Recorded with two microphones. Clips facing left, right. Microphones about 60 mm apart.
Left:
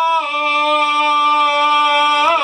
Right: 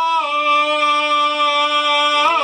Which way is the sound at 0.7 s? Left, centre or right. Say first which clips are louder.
Left 1 dB; right.